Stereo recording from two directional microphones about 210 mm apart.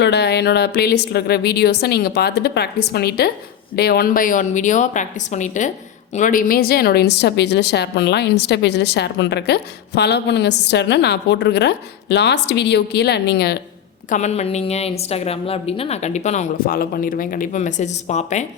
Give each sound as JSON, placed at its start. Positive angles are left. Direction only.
{"t": 0.0, "sound": "a woman's voice", "side_deg": 50}
{"t": 14.1, "sound": "a woman's voice", "side_deg": 30}